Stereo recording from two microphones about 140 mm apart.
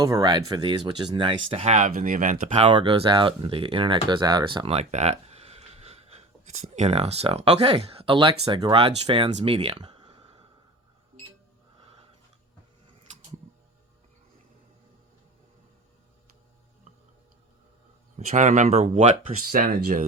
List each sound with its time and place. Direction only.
0.0 s speech: 25° right (ahead or behind); by 1.9 s 55° right (ahead or behind)
1.9 s speech: 80° right
2.7 s speech: 40° right (ahead or behind)
4.7 s speech: 50° right (ahead or behind); by 9.3 s 35° right (ahead or behind)
9.3 s a sound: 45° right (ahead or behind)
18.3 s speech: 60° right (ahead or behind)
19.5 s speech: 90° right